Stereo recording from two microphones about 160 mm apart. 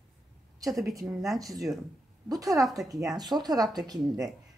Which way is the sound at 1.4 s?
20° right (ahead or behind).